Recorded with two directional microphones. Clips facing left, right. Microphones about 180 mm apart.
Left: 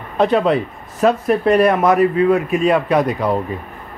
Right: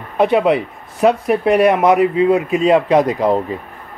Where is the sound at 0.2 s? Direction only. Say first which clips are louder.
Right 1 dB; 15° right (ahead or behind).